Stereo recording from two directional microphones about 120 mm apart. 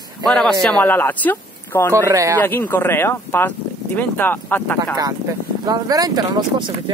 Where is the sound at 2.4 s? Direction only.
15° left (ahead or behind).